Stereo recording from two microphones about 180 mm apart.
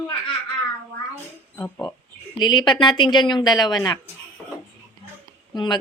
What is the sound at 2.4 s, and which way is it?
A woman's voice, 25° left (ahead or behind).